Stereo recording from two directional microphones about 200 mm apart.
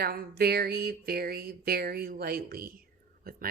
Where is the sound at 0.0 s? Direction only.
50° right (ahead or behind).